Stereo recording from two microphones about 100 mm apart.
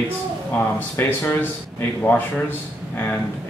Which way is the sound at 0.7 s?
20° left (ahead or behind).